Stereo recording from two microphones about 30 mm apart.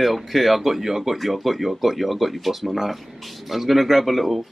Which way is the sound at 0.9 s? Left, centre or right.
Centre.